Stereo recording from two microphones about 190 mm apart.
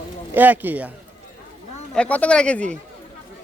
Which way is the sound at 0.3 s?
10° right (ahead or behind).